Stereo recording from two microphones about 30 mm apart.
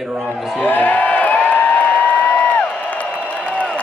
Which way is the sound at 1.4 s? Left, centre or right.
Left.